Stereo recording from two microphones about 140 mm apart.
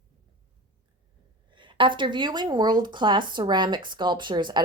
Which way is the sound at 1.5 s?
35° right (ahead or behind).